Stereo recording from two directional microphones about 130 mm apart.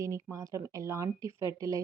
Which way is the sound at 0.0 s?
25° right (ahead or behind).